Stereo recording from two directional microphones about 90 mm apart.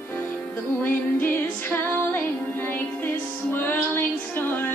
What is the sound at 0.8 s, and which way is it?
Music, 20° left (ahead or behind).